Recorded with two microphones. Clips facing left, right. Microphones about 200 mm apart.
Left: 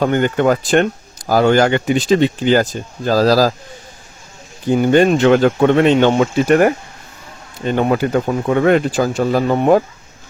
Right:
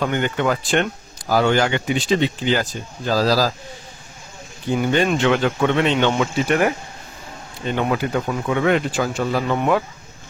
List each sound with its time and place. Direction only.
0.0 s speech: 45° left (ahead or behind)
4.6 s speech: 45° left (ahead or behind)